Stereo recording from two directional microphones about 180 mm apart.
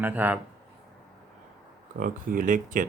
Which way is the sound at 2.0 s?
50° right (ahead or behind).